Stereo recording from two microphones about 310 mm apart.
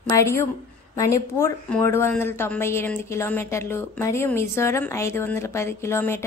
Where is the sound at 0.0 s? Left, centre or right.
Centre.